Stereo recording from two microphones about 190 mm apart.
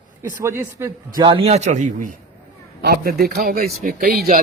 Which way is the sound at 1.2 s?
30° right (ahead or behind).